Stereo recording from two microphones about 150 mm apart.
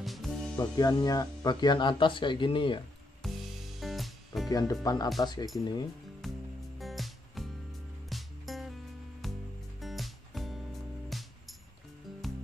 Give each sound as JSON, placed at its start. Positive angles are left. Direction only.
{"t": 0.0, "sound": "music", "side_deg": 0}
{"t": 0.6, "sound": "speech", "side_deg": 25}
{"t": 3.2, "sound": "music", "side_deg": 0}
{"t": 4.5, "sound": "speech", "side_deg": 25}
{"t": 6.2, "sound": "music", "side_deg": 0}